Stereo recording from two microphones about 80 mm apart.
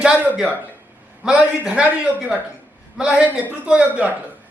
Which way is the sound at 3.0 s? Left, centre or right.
Centre.